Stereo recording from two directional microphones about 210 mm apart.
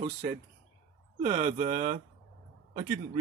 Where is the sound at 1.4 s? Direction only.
35° right (ahead or behind).